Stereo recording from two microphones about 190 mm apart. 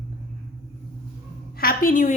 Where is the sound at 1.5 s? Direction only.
50° left (ahead or behind).